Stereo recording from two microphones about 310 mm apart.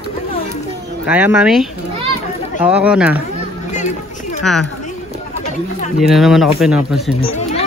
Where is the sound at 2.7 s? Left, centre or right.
Centre.